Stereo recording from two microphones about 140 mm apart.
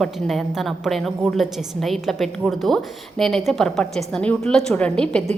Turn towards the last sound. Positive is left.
turn(degrees=5)  # may be behind; listen again after turning